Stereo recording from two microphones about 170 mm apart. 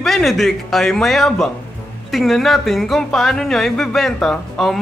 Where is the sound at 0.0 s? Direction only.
Centre (ahead or behind).